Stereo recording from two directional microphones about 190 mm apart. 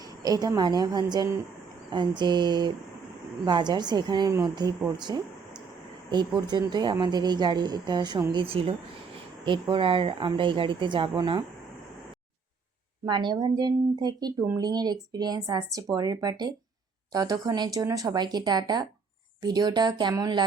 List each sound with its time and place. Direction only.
0.2 s speech: 20° right (ahead or behind)
13.1 s speech: 25° right (ahead or behind)